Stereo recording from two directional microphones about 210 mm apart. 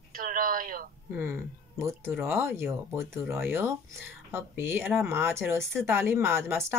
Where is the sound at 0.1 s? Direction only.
40° right (ahead or behind).